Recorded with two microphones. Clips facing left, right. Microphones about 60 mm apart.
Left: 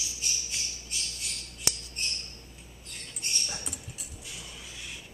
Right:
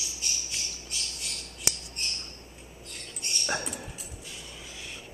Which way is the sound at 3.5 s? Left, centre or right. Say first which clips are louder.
Right 9 dB; right.